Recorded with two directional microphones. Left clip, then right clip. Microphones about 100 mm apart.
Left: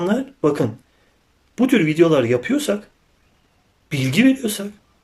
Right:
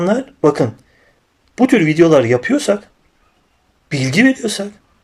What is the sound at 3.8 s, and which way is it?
Speech, 20° left (ahead or behind).